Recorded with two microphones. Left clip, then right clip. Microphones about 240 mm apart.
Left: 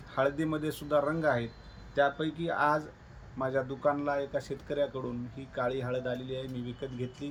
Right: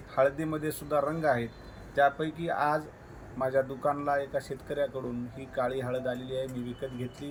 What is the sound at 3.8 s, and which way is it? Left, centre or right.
Speech, left.